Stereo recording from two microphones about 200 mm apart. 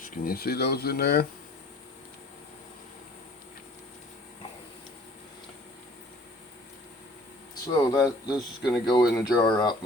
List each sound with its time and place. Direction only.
0.0 s speech: 50° left (ahead or behind)
7.7 s speech: 20° left (ahead or behind)